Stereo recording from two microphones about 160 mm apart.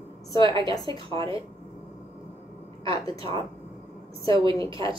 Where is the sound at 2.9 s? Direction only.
20° left (ahead or behind).